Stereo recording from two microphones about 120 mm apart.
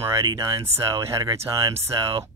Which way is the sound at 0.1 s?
25° right (ahead or behind).